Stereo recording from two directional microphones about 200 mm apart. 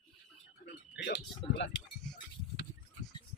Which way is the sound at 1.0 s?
60° left (ahead or behind).